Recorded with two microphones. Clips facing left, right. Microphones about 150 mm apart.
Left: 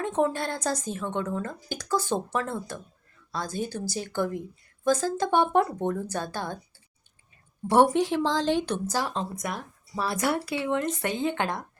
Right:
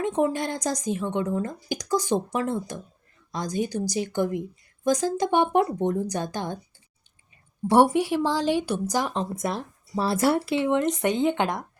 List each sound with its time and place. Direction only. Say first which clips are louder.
0.0 s a woman's voice: right 2 dB; 15° right (ahead or behind)
7.7 s speech: right 2 dB; 10° right (ahead or behind)